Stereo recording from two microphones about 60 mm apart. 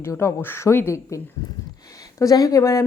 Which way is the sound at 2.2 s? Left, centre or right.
Left.